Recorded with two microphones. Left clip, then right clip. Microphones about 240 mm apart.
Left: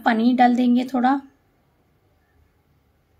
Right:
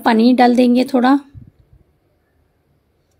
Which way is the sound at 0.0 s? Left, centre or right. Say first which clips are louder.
Right 5 dB; right.